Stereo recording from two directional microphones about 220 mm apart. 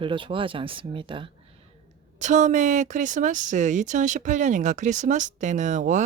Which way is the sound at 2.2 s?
35° right (ahead or behind).